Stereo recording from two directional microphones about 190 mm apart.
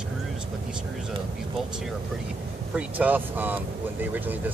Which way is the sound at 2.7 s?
10° right (ahead or behind).